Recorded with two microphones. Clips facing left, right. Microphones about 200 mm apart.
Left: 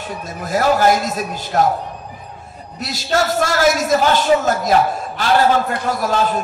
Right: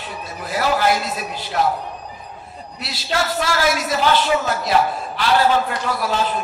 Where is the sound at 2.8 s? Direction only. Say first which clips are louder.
Left 5 dB; 45° left (ahead or behind).